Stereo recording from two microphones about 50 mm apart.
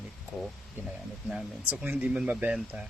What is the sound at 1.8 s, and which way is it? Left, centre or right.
Speech, right.